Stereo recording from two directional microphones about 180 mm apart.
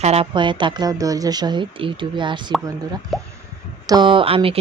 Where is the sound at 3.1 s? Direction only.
Centre (ahead or behind).